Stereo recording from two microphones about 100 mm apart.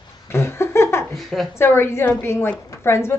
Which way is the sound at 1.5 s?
25° left (ahead or behind).